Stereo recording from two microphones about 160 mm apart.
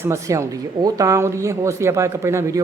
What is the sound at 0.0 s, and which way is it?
A woman's voice, 20° right (ahead or behind).